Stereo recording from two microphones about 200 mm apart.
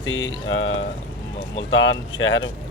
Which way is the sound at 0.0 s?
75° left (ahead or behind).